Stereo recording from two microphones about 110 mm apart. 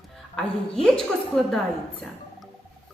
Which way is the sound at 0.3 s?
5° left (ahead or behind).